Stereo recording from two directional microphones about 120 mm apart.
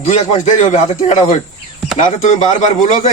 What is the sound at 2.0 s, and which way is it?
Speech, 85° left.